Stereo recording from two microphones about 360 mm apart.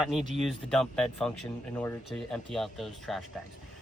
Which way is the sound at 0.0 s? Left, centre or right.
Centre.